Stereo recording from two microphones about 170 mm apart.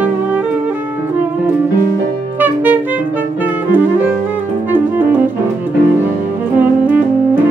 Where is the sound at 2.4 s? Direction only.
10° right (ahead or behind).